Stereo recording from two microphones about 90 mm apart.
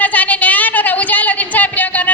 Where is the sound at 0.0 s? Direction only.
15° left (ahead or behind).